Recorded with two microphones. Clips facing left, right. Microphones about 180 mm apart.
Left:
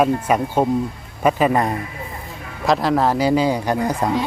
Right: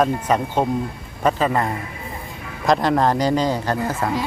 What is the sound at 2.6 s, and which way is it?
Speech, centre (ahead or behind).